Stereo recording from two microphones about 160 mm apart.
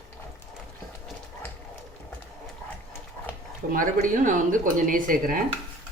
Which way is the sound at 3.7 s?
55° right (ahead or behind).